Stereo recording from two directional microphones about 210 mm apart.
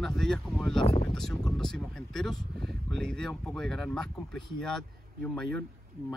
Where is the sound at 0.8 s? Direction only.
30° left (ahead or behind).